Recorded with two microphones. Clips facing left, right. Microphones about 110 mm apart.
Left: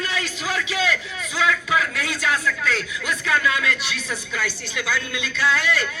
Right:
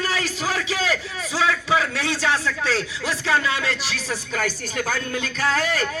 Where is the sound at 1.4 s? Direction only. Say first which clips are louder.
Right 1 dB; 30° right (ahead or behind).